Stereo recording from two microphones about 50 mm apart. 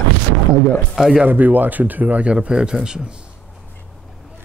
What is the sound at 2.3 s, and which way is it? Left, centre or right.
Speech, centre.